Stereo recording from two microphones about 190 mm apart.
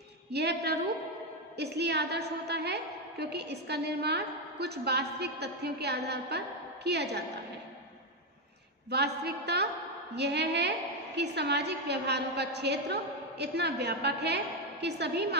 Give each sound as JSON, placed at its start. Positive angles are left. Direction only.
{"t": 0.3, "sound": "a woman's voice", "side_deg": -60}
{"t": 8.9, "sound": "a woman's voice", "side_deg": -60}